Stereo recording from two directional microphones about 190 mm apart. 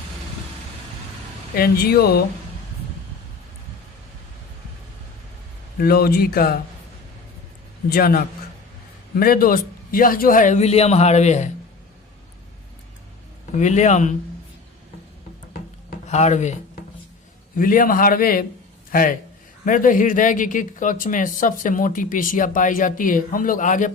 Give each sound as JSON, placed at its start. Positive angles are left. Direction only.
{"t": 1.5, "sound": "speech", "side_deg": 50}
{"t": 5.8, "sound": "speech", "side_deg": 55}
{"t": 7.9, "sound": "a man's voice", "side_deg": 55}
{"t": 13.6, "sound": "a man's voice", "side_deg": 40}
{"t": 16.0, "sound": "a man's voice", "side_deg": 35}
{"t": 17.6, "sound": "a man's voice", "side_deg": 45}